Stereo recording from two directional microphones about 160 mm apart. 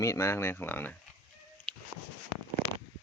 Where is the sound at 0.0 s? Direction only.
20° left (ahead or behind).